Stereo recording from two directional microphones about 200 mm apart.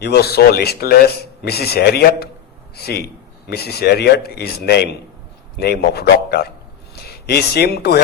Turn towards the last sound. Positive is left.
turn(degrees=55)  # may be behind; listen again after turning